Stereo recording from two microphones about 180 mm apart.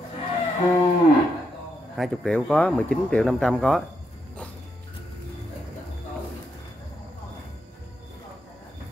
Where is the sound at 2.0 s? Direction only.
5° left (ahead or behind).